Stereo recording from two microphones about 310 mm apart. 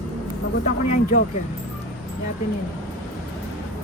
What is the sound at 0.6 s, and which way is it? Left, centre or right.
Speech, left.